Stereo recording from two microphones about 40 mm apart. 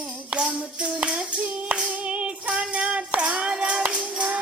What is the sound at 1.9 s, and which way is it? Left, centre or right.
Clapping, right.